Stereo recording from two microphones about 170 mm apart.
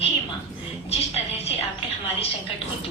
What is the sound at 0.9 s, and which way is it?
Music, 40° left (ahead or behind).